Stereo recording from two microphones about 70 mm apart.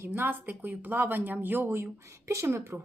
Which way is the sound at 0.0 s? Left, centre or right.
Right.